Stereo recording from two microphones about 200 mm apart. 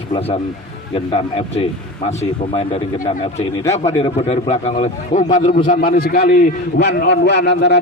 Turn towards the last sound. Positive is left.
turn(degrees=60)  # may be behind; listen again after turning